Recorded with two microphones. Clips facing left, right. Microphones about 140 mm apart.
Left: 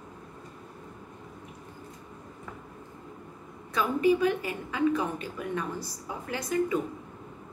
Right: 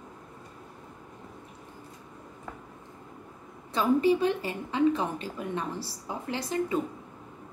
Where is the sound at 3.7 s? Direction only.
30° right (ahead or behind).